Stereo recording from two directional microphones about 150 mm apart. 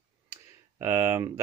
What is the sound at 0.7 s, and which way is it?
Speech, 20° right (ahead or behind).